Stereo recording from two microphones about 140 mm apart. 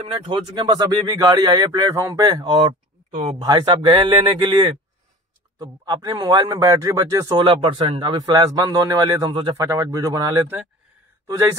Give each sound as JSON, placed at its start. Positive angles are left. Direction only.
{"t": 0.0, "sound": "speech", "side_deg": -45}
{"t": 3.1, "sound": "speech", "side_deg": -45}
{"t": 3.3, "sound": "a man's voice", "side_deg": -30}
{"t": 8.1, "sound": "speech", "side_deg": -30}
{"t": 9.6, "sound": "speech", "side_deg": -25}